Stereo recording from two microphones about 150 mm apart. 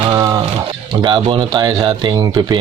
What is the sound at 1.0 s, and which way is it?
Speech, 35° right (ahead or behind).